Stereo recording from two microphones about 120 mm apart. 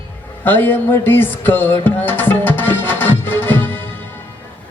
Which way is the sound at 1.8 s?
15° left (ahead or behind).